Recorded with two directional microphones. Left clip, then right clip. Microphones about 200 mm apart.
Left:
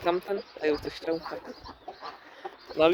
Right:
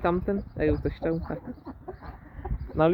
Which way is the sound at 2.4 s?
15° left (ahead or behind).